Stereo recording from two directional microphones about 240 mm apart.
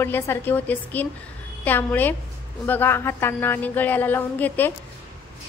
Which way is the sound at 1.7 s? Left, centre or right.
Centre.